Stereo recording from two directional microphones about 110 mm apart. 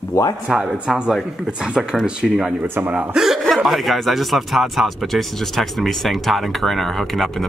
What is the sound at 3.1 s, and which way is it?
Speech, 5° right (ahead or behind).